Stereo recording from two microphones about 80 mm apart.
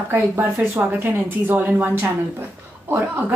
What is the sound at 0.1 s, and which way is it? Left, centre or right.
Speech, right.